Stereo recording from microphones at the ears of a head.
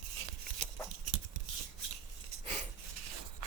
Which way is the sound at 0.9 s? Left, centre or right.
Right.